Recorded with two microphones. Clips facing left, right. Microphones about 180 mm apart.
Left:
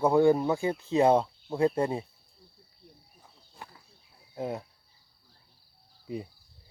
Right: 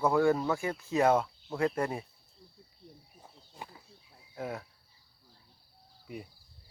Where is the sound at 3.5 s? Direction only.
15° right (ahead or behind).